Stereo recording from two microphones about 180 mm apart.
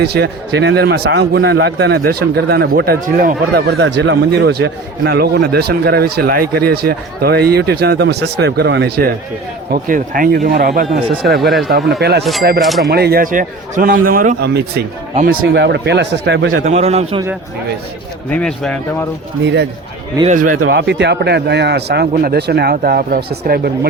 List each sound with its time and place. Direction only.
0.0 s a man's voice: 65° right (ahead or behind)
9.7 s a man's voice: 50° right (ahead or behind)
11.4 s speech: centre (ahead or behind)
11.7 s a man's voice: 65° right (ahead or behind)
12.2 s speech: centre (ahead or behind)
12.9 s a man's voice: 60° right (ahead or behind)
15.1 s speech: 50° right (ahead or behind); by 16.5 s 75° right (ahead or behind)
16.6 s a man's voice: 35° right (ahead or behind)
18.3 s speech: 5° left (ahead or behind)
20.2 s a man's voice: 45° right (ahead or behind)
20.7 s a man's voice: 70° right (ahead or behind)